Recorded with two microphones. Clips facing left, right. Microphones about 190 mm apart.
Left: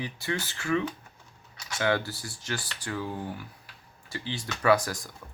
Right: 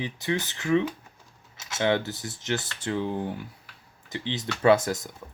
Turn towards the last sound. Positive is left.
turn(degrees=-25)  # may be behind; listen again after turning